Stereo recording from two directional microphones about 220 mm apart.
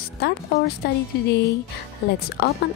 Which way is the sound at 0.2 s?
45° left (ahead or behind).